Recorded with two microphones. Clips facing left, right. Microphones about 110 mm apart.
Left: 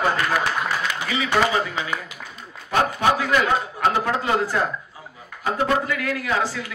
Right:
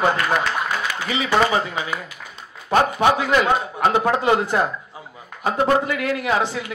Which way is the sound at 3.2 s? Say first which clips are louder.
Right 2 dB; 20° right (ahead or behind).